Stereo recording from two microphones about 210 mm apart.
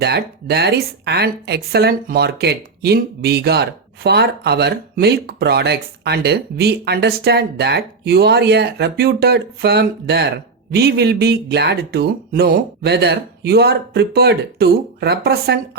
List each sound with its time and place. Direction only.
0.0 s speech: 50° right (ahead or behind)